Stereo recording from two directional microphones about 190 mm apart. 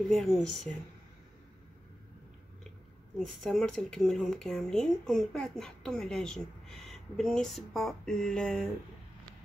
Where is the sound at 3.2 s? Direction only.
Centre (ahead or behind).